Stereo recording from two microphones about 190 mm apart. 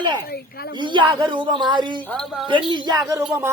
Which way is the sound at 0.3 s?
55° left (ahead or behind).